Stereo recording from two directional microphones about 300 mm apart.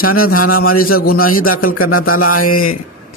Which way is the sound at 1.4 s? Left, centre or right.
Left.